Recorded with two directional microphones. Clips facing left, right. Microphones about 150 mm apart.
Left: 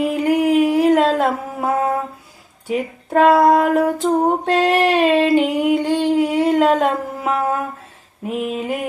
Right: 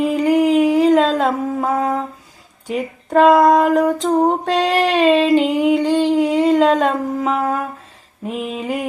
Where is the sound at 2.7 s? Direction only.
Centre (ahead or behind).